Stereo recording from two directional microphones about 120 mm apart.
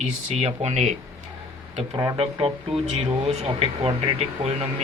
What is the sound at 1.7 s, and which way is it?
Speech, 55° right (ahead or behind).